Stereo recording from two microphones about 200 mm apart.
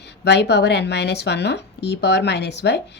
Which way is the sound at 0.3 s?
55° left (ahead or behind).